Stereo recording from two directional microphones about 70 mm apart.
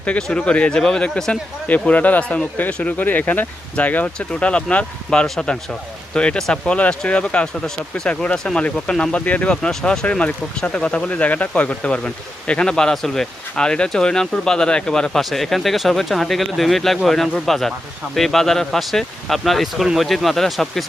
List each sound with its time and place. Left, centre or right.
0.0 s speech: centre